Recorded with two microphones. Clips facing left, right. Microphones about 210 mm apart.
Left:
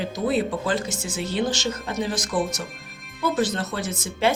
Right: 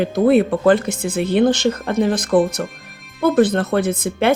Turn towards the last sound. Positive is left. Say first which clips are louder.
# right 6 dB
turn(degrees=-60)  # may be behind; listen again after turning